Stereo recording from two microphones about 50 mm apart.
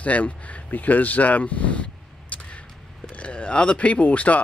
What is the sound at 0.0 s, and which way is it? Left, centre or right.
Speech, left.